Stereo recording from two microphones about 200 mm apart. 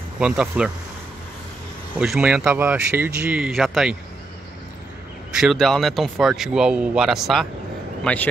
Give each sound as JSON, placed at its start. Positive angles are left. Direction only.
{"t": 0.2, "sound": "speech", "side_deg": -5}
{"t": 2.0, "sound": "speech", "side_deg": -5}
{"t": 5.4, "sound": "a man's voice", "side_deg": 0}